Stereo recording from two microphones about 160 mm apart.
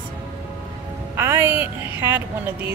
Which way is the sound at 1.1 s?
15° right (ahead or behind).